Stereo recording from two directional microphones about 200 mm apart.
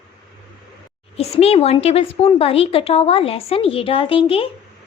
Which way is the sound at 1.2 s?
30° left (ahead or behind).